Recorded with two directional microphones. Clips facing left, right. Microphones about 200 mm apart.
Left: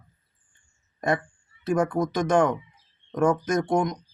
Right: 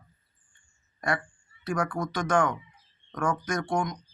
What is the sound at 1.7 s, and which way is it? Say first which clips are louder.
Speech: left 6 dB; 20° left (ahead or behind).